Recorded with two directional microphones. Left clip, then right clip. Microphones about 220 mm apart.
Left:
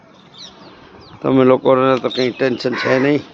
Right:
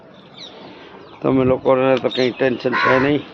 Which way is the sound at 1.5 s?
50° left (ahead or behind).